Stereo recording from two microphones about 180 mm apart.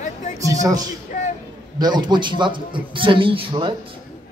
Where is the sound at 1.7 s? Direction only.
25° right (ahead or behind).